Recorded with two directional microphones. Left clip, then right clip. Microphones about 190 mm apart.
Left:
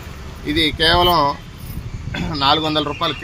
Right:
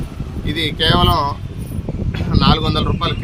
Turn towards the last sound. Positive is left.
turn(degrees=20)  # may be behind; listen again after turning